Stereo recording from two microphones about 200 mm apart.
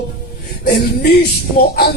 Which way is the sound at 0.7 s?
55° left (ahead or behind).